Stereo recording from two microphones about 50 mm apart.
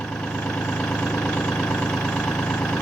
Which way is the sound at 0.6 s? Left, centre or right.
Left.